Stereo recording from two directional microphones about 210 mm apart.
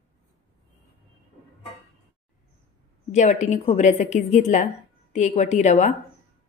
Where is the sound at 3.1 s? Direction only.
35° left (ahead or behind).